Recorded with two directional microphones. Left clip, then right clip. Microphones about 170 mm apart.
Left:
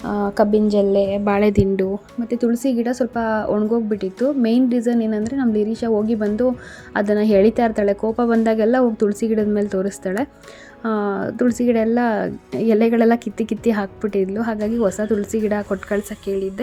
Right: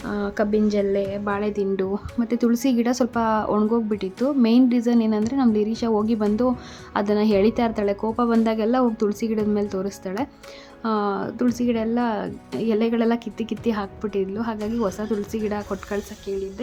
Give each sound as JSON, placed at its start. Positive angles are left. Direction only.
{"t": 0.3, "sound": "a woman's voice", "side_deg": 15}
{"t": 1.2, "sound": "speech", "side_deg": 35}
{"t": 2.2, "sound": "a woman's voice", "side_deg": 0}